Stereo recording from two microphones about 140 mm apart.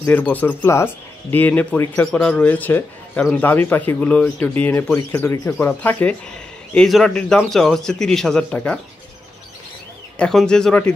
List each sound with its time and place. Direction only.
0.1 s a man's voice: 10° left (ahead or behind)
10.1 s a man's voice: 5° left (ahead or behind)